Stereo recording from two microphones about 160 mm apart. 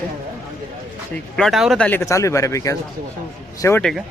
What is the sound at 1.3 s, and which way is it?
Speech, centre (ahead or behind).